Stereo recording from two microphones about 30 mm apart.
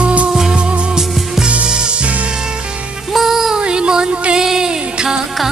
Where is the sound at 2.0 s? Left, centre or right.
Right.